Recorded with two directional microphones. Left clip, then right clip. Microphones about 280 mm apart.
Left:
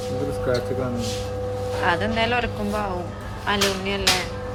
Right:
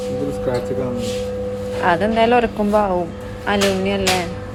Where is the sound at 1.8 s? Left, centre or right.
Centre.